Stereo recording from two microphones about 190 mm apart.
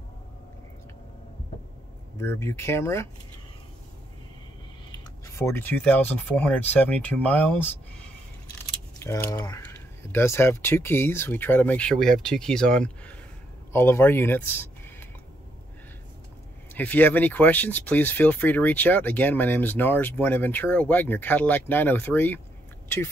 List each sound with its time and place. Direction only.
2.1 s speech: 15° left (ahead or behind)
4.9 s speech: 15° left (ahead or behind)
9.0 s speech: 15° left (ahead or behind)
16.7 s speech: 10° left (ahead or behind)